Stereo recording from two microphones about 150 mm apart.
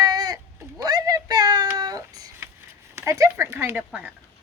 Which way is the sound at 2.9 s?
20° right (ahead or behind).